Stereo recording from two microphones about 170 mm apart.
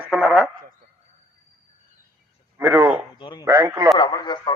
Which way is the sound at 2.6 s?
15° right (ahead or behind).